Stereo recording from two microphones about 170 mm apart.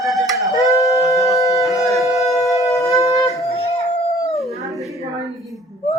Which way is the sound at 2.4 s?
20° left (ahead or behind).